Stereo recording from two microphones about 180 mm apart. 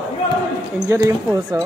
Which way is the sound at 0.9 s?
15° right (ahead or behind).